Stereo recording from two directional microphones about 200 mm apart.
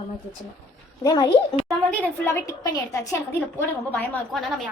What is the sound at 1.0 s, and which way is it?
Speech, 20° left (ahead or behind).